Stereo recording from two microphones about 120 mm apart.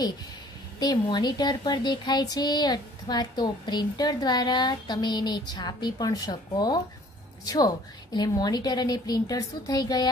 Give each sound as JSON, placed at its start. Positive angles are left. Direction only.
{"t": 0.7, "sound": "speech", "side_deg": 35}